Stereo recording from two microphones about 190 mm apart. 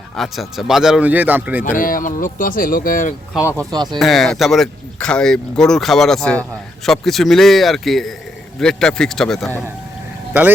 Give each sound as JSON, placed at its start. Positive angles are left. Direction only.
{"t": 0.2, "sound": "speech", "side_deg": 0}
{"t": 1.6, "sound": "speech", "side_deg": 45}
{"t": 3.3, "sound": "speech", "side_deg": -10}
{"t": 3.9, "sound": "speech", "side_deg": 0}